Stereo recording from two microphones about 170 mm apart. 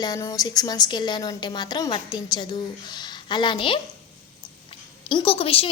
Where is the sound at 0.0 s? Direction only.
20° left (ahead or behind).